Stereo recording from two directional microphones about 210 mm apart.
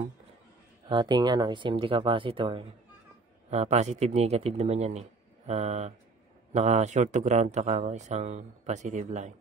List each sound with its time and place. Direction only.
0.8 s speech: 20° right (ahead or behind)